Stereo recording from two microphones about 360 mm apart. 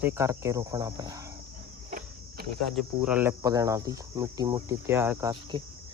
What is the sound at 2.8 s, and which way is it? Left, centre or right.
Speech, centre.